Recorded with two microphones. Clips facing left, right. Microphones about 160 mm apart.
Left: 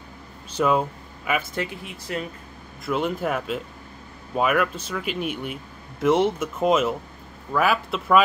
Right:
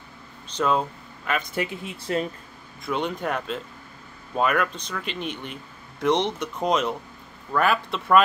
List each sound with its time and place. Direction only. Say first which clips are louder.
0.5 s speech: left 2 dB; 10° left (ahead or behind)
2.1 s speech: right 4 dB; 30° right (ahead or behind)
2.8 s speech: left 2 dB; 5° left (ahead or behind)